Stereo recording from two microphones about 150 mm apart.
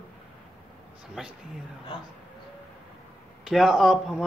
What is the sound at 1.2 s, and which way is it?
Speech, 5° right (ahead or behind).